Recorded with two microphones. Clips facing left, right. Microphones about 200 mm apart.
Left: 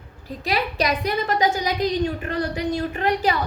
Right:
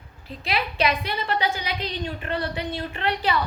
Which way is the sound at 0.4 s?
40° left (ahead or behind).